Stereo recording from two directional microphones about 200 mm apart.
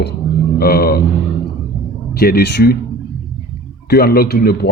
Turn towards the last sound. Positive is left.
turn(degrees=55)  # may be behind; listen again after turning